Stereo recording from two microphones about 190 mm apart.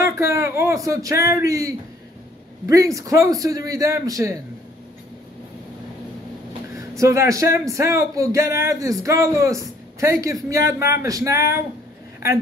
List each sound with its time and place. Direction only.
0.0 s speech: 15° right (ahead or behind)
6.7 s speech: 15° right (ahead or behind)